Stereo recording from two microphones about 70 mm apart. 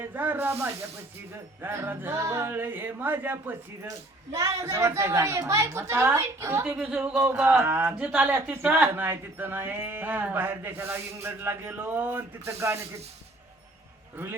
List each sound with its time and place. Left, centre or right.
0.0 s a child's voice: right
3.8 s a child's voice: right
6.7 s a child's voice: centre; by 12.8 s right